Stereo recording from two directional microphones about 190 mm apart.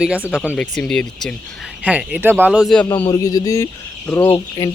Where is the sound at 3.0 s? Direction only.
20° left (ahead or behind).